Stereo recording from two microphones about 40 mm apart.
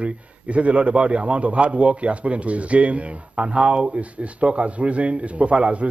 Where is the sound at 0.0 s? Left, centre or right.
Right.